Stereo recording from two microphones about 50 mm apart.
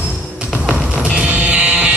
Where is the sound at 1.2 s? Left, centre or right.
Right.